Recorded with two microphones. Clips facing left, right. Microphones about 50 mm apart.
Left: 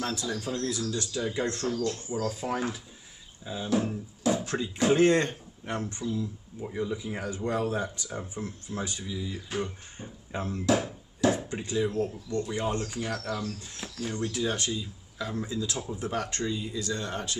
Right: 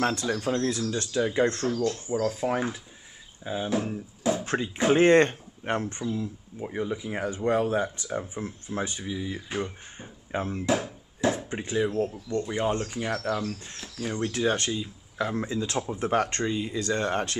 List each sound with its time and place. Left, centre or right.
0.0 s speech: right
0.7 s speech: right
1.9 s speech: centre
2.2 s speech: right
4.5 s speech: right
10.7 s a sound: right
11.5 s speech: right
14.2 s speech: right